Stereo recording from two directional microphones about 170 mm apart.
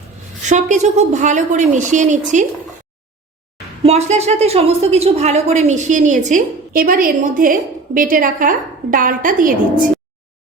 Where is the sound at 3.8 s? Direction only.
40° right (ahead or behind).